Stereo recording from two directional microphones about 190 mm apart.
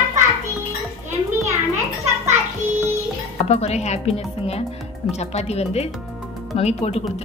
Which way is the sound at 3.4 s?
35° left (ahead or behind).